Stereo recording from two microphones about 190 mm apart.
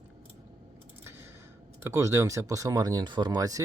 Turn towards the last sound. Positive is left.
turn(degrees=-20)  # may be behind; listen again after turning